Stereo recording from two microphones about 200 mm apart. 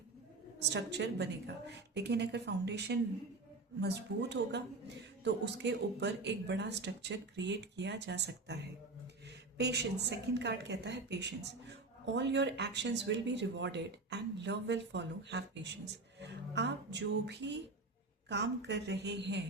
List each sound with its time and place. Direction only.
0.6 s a woman's voice: 60° right (ahead or behind)